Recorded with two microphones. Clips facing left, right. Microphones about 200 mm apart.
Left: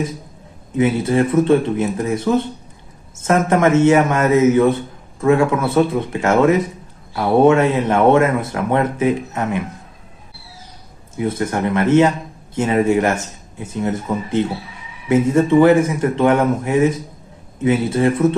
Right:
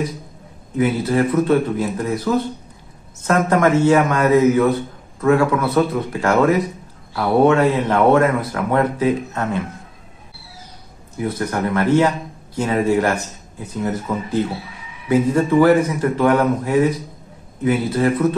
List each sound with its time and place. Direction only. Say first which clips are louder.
0.7 s speech: left 2 dB; 25° left (ahead or behind)
11.1 s speech: left 2 dB; 25° left (ahead or behind)